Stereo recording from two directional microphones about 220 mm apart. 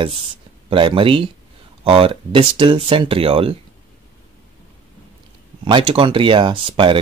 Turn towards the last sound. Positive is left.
turn(degrees=-25)  # may be behind; listen again after turning